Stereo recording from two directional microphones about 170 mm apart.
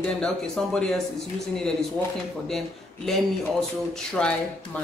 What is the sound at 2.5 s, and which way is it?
Speech, centre (ahead or behind).